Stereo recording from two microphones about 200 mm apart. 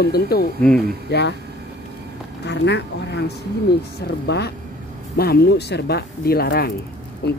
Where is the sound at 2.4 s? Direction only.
60° left (ahead or behind).